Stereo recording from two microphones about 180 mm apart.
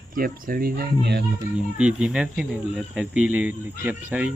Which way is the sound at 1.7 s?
5° right (ahead or behind).